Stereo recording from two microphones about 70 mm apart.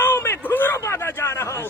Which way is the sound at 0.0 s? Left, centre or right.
Left.